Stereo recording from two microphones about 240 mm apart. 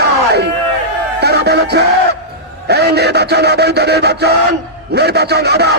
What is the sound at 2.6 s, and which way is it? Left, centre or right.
A man's voice, right.